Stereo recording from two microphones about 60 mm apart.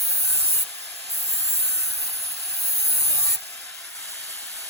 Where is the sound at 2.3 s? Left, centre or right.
Left.